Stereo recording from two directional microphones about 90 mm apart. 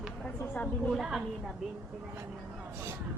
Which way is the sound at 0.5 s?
20° left (ahead or behind).